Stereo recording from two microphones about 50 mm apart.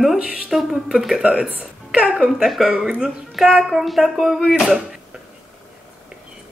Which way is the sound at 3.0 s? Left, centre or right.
Centre.